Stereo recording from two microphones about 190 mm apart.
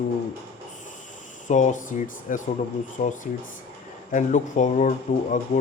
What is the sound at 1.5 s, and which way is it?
Speech, 40° left (ahead or behind).